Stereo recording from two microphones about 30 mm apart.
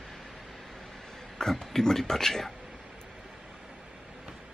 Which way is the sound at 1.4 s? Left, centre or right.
Centre.